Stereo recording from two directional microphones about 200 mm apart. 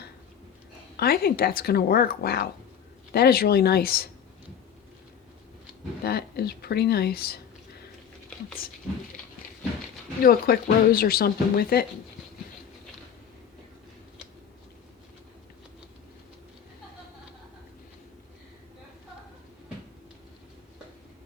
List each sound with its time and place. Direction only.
0.9 s speech: 50° left (ahead or behind)
6.1 s speech: 50° left (ahead or behind)
10.2 s speech: 50° left (ahead or behind)